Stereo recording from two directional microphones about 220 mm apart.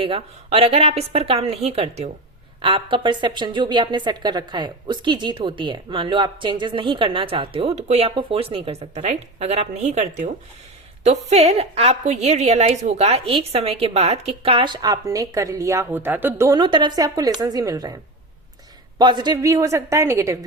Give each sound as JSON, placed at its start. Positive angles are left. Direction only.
{"t": 0.0, "sound": "a woman's voice", "side_deg": -25}